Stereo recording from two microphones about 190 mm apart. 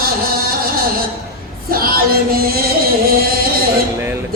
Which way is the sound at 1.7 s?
50° right (ahead or behind).